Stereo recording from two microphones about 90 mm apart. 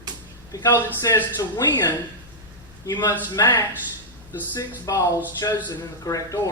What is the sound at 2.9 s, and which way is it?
Speech, 50° left (ahead or behind).